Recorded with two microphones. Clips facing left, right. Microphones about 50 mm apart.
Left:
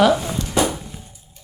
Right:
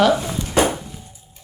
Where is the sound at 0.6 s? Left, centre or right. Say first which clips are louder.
Right 2 dB; right.